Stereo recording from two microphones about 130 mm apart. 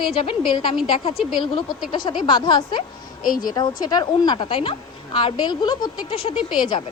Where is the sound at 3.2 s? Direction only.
90° left.